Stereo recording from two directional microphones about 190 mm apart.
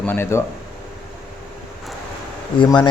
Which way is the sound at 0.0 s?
10° left (ahead or behind).